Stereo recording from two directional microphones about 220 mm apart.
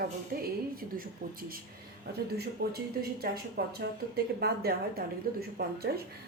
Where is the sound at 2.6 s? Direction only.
45° right (ahead or behind).